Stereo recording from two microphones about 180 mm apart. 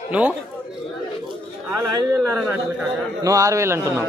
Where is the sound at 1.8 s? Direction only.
15° right (ahead or behind).